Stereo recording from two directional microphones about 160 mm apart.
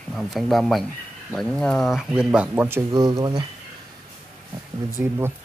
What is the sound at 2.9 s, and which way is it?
Speech, 25° right (ahead or behind).